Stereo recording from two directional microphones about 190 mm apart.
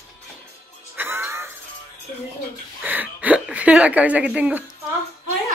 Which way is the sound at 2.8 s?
10° right (ahead or behind).